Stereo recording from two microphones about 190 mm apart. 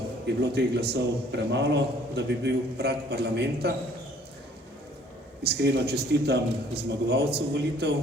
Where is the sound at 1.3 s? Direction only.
65° right (ahead or behind).